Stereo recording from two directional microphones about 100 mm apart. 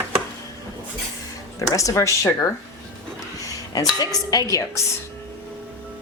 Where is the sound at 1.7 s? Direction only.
35° left (ahead or behind).